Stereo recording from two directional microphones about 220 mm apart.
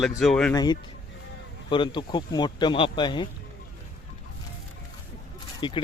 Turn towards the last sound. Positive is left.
turn(degrees=20)  # may be behind; listen again after turning